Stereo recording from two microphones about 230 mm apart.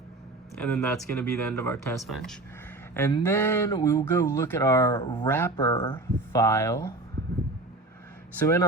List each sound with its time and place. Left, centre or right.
0.6 s speech: centre
2.0 s speech: centre
8.4 s speech: centre